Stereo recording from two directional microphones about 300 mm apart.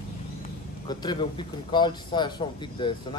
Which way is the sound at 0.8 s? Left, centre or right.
Centre.